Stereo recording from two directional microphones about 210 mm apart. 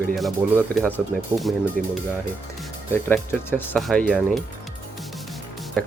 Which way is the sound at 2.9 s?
10° left (ahead or behind).